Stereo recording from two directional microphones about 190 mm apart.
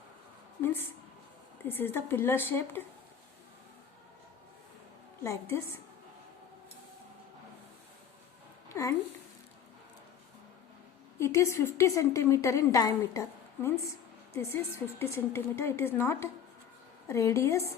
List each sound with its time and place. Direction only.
0.6 s a woman's voice: 10° left (ahead or behind)
5.2 s a woman's voice: 15° left (ahead or behind)
8.7 s a sound: 15° left (ahead or behind)
11.2 s a woman's voice: 15° left (ahead or behind)